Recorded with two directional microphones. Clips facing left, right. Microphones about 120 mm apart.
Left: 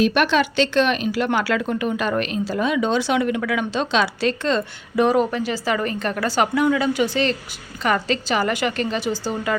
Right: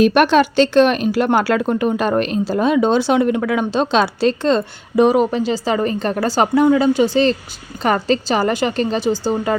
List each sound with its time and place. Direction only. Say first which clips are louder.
0.0 s speech: right 6 dB; 50° right (ahead or behind); by 5.0 s 35° right (ahead or behind)
5.0 s speech: right 4 dB; 20° right (ahead or behind)